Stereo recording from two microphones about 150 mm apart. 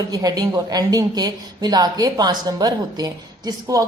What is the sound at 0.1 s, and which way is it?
Speech, 25° right (ahead or behind).